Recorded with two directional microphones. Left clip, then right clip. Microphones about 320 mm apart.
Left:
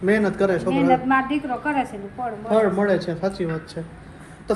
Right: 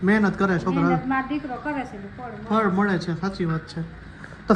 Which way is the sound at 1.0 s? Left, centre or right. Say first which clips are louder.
Left 5 dB; left.